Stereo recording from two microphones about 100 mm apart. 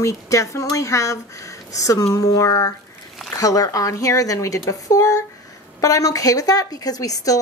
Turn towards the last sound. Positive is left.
turn(degrees=35)  # may be behind; listen again after turning